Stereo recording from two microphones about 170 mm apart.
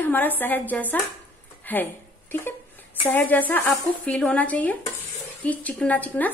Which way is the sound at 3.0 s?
10° left (ahead or behind).